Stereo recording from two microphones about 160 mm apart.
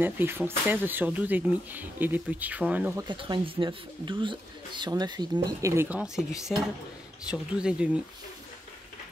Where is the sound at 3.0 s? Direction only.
30° right (ahead or behind).